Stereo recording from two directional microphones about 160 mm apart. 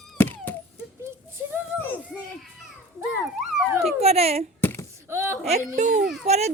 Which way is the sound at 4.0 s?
40° right (ahead or behind).